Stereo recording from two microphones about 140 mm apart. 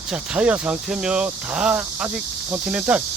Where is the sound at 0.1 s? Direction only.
5° right (ahead or behind).